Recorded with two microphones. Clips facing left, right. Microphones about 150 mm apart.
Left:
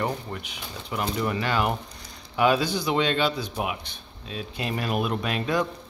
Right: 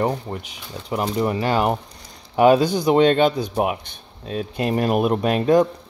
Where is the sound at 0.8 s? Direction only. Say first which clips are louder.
Right 6 dB; 40° right (ahead or behind).